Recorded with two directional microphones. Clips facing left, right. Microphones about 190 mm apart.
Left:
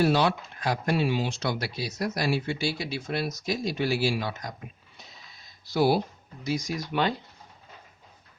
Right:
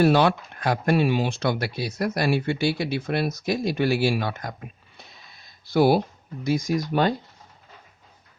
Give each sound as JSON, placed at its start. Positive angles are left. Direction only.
{"t": 0.0, "sound": "speech", "side_deg": -55}